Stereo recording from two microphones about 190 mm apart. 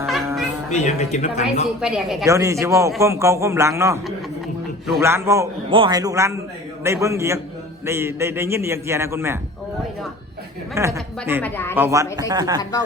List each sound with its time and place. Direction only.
0.7 s speech: 40° left (ahead or behind)
1.8 s speech: 5° right (ahead or behind)
2.2 s a man's voice: 15° right (ahead or behind)
10.8 s a man's voice: 15° right (ahead or behind)
11.4 s speech: 10° left (ahead or behind)
11.7 s a man's voice: 15° right (ahead or behind)